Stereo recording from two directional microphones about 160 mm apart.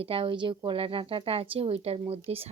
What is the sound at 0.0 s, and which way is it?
Speech, 35° right (ahead or behind).